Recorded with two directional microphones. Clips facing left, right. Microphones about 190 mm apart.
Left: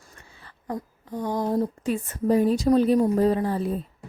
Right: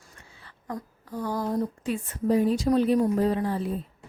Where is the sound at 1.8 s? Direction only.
45° left (ahead or behind).